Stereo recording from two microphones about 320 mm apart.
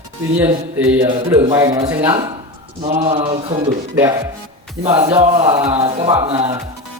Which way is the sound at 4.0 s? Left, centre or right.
Centre.